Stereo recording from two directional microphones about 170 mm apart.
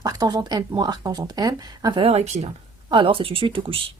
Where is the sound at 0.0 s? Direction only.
20° right (ahead or behind); by 2.5 s 40° right (ahead or behind).